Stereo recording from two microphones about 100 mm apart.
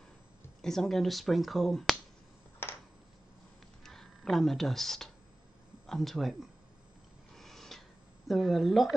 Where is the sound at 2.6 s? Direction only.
25° left (ahead or behind).